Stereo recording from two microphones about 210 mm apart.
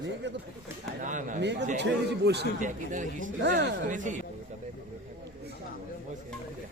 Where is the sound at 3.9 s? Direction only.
35° right (ahead or behind).